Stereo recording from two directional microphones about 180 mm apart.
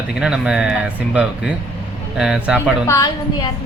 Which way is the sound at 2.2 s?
5° right (ahead or behind).